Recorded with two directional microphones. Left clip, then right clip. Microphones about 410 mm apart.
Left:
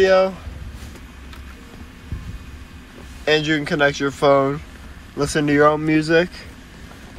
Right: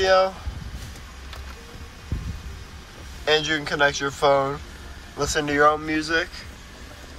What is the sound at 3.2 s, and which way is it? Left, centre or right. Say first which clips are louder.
Speech: left 3 dB; centre.